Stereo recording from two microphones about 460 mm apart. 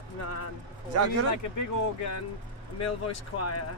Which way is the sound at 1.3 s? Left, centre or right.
Left.